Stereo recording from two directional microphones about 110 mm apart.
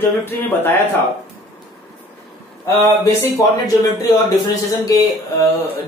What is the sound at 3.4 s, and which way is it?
Speech, 30° left (ahead or behind).